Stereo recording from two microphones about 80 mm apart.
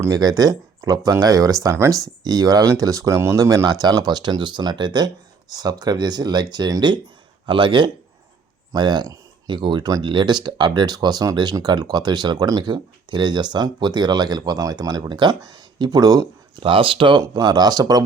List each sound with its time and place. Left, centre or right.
0.1 s speech: right
2.2 s speech: right
7.4 s speech: right
8.7 s speech: right
16.6 s speech: right
17.2 s speech: right